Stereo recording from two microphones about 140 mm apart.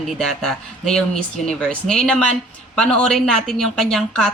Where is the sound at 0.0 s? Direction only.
Centre (ahead or behind).